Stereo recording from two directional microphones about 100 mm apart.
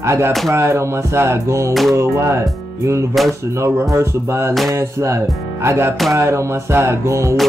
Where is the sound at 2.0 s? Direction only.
30° right (ahead or behind).